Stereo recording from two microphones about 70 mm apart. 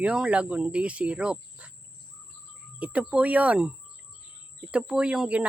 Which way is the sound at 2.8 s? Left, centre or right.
Centre.